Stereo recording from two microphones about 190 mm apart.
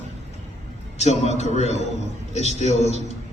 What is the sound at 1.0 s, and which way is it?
A man's voice, 35° left (ahead or behind).